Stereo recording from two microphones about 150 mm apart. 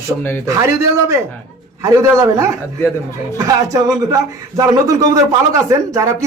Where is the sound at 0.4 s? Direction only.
20° right (ahead or behind).